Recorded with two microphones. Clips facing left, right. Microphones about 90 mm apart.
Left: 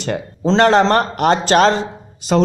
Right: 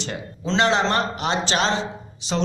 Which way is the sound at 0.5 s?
50° left (ahead or behind).